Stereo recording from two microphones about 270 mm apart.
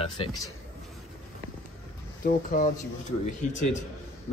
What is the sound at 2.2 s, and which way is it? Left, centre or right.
Speech, left.